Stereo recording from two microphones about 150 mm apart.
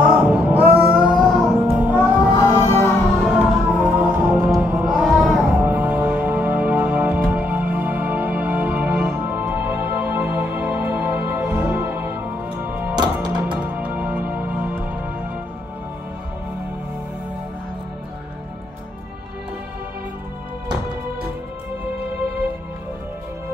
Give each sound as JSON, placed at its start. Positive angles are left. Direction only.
{"t": 0.0, "sound": "music", "side_deg": -10}
{"t": 1.8, "sound": "music", "side_deg": -10}
{"t": 2.3, "sound": "music", "side_deg": 20}
{"t": 3.7, "sound": "music", "side_deg": -10}
{"t": 12.9, "sound": "music", "side_deg": -30}
{"t": 13.6, "sound": "music", "side_deg": -10}